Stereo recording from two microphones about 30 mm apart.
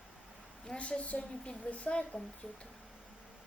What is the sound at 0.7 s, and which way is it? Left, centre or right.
Speech, left.